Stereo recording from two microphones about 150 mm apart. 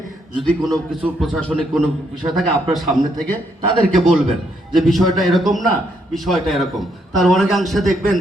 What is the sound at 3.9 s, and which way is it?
A man's voice, centre (ahead or behind).